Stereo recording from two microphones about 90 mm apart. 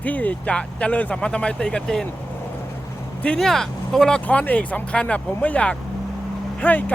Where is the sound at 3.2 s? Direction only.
10° left (ahead or behind).